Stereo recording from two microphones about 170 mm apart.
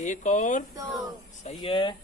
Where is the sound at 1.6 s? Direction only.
30° left (ahead or behind).